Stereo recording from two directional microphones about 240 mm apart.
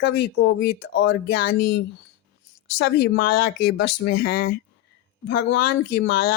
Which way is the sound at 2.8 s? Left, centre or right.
Left.